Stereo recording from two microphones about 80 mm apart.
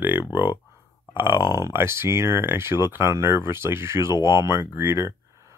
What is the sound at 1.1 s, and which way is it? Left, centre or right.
Speech, right.